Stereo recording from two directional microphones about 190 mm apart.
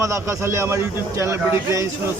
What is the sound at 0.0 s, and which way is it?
Speech, 15° right (ahead or behind).